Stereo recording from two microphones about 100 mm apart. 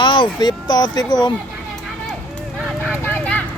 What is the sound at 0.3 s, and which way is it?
Speech, 45° left (ahead or behind).